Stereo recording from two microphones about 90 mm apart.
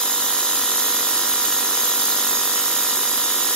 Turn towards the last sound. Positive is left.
turn(degrees=5)  # may be behind; listen again after turning